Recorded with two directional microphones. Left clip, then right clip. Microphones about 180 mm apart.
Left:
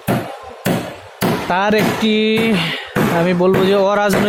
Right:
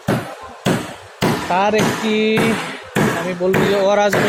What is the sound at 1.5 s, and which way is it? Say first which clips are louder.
Speech: left 1 dB; 60° left (ahead or behind).